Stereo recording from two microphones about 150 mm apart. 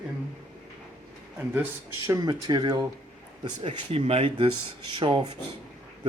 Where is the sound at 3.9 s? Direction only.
40° right (ahead or behind).